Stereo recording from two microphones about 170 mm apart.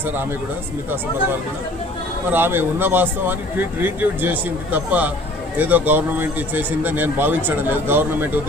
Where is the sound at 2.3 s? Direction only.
10° right (ahead or behind).